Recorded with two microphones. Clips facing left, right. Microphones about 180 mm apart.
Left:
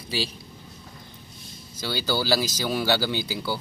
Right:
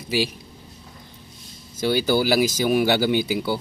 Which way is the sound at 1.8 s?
20° right (ahead or behind).